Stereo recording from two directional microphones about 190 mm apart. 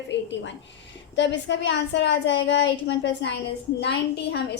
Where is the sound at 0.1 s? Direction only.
70° left (ahead or behind).